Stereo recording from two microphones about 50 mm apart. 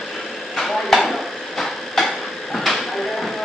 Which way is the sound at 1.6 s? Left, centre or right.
Centre.